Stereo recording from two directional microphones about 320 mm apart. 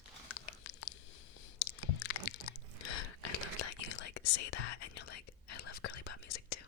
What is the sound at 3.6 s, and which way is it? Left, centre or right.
Whispering, left.